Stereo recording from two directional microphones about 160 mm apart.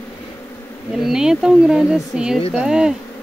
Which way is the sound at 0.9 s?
5° right (ahead or behind).